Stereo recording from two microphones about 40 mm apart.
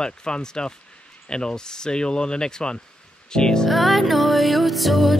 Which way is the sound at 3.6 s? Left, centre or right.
Centre.